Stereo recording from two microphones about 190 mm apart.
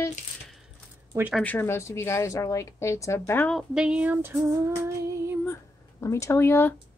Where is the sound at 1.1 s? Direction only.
10° right (ahead or behind).